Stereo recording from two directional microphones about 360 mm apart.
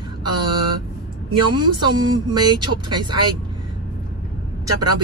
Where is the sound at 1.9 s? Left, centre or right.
Centre.